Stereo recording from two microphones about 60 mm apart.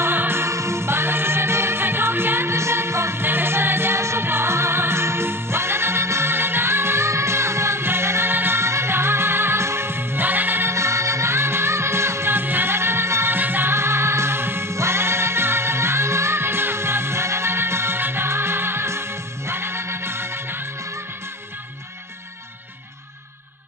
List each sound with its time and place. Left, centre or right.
0.0 s music: right